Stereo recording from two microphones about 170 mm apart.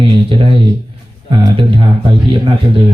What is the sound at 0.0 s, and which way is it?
Speech, 30° right (ahead or behind).